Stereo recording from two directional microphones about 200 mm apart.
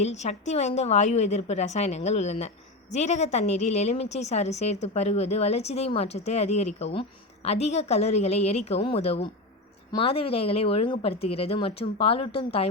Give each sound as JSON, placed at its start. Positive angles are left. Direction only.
{"t": 0.0, "sound": "a woman's voice", "side_deg": 35}